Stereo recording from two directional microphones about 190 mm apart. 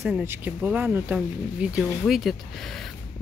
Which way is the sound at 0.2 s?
10° right (ahead or behind).